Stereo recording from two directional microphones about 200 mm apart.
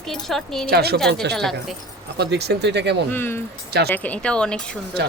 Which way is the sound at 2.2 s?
55° right (ahead or behind).